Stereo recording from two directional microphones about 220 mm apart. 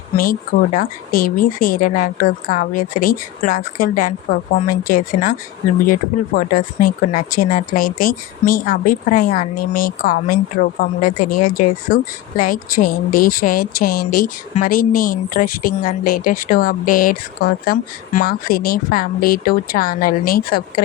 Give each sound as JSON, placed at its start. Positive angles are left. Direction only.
{"t": 0.8, "sound": "speech", "side_deg": 40}